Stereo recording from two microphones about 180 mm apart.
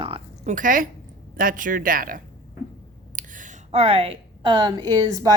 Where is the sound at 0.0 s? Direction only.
30° right (ahead or behind).